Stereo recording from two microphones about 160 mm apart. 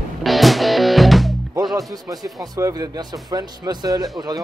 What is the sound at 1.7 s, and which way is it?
Speech, 25° right (ahead or behind).